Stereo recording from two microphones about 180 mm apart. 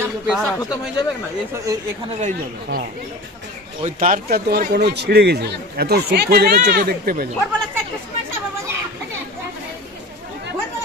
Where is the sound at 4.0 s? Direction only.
55° right (ahead or behind).